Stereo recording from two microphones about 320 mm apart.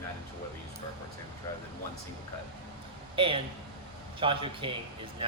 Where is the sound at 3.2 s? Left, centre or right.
Centre.